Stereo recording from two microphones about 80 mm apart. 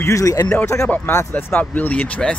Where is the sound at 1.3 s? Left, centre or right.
Centre.